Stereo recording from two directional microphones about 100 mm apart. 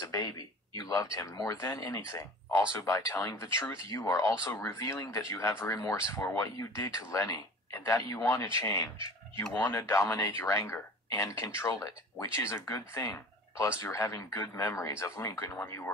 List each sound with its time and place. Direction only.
0.0 s a sound: 40° left (ahead or behind)
0.7 s speech: 35° left (ahead or behind)
8.9 s speech: 60° right (ahead or behind)
9.6 s speech: 30° left (ahead or behind)